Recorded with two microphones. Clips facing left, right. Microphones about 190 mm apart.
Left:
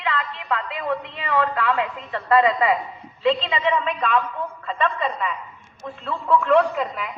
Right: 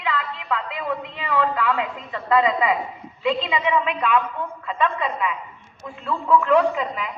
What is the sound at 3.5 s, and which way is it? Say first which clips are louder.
A woman's voice: even; 10° right (ahead or behind).